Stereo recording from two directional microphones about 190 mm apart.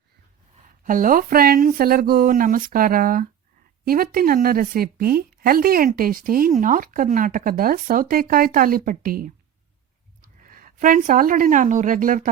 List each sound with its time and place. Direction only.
0.9 s speech: 45° right (ahead or behind)
10.4 s speech: 45° right (ahead or behind)